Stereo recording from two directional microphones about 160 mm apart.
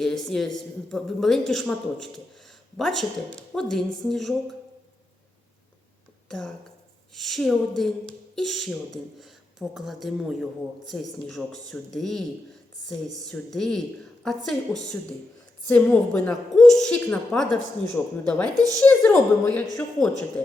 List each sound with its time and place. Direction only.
0.0 s speech: centre (ahead or behind)
6.2 s speech: 5° left (ahead or behind)
13.2 s a woman's voice: 5° left (ahead or behind)
18.5 s a woman's voice: 20° right (ahead or behind)
18.8 s speech: 10° left (ahead or behind)